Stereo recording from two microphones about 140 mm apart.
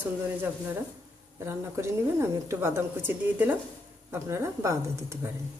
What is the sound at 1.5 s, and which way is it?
A woman's voice, 20° right (ahead or behind).